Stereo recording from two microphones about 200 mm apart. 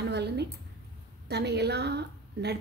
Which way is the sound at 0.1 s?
55° right (ahead or behind).